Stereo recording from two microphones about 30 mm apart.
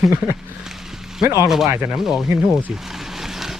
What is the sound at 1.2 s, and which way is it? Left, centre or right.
Speech, centre.